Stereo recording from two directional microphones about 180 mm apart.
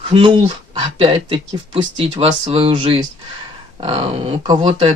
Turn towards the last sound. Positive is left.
turn(degrees=-35)  # may be behind; listen again after turning